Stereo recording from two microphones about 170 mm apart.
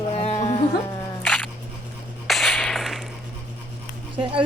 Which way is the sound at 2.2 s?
Centre (ahead or behind).